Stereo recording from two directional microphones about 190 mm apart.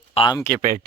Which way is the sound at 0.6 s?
40° right (ahead or behind).